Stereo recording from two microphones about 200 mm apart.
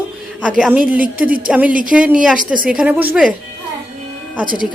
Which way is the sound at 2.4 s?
40° right (ahead or behind).